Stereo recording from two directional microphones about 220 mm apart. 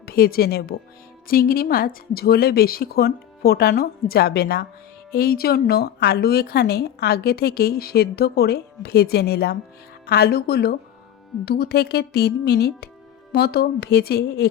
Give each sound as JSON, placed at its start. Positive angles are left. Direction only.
{"t": 0.0, "sound": "speech", "side_deg": 40}